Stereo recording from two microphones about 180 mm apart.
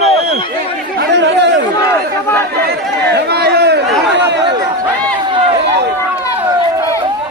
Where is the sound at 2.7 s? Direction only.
65° right (ahead or behind).